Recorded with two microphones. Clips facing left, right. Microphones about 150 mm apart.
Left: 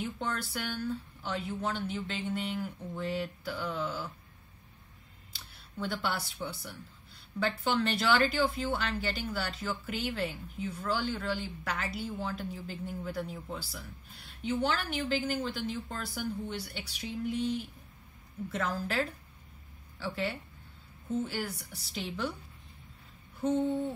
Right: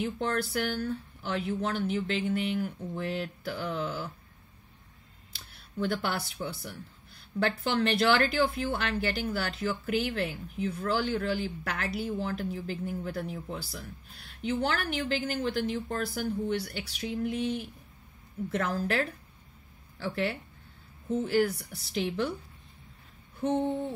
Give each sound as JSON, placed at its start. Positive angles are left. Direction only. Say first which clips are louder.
{"t": 0.0, "sound": "a woman's voice", "louder": "right 5 dB", "side_deg": -60}
{"t": 5.9, "sound": "a woman's voice", "louder": "right 2 dB", "side_deg": -55}
{"t": 21.4, "sound": "a woman's voice", "louder": "right 11 dB", "side_deg": -65}